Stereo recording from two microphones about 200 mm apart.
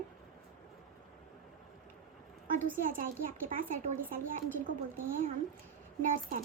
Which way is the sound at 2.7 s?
45° right (ahead or behind).